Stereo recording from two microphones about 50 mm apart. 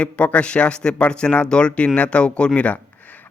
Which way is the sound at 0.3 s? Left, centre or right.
Left.